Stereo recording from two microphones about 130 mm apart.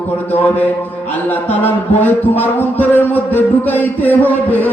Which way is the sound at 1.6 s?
15° left (ahead or behind).